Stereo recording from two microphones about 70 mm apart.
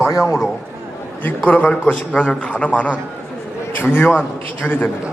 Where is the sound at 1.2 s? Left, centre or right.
Left.